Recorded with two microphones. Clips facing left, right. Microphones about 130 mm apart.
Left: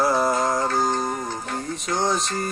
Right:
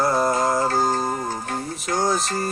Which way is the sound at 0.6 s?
40° right (ahead or behind).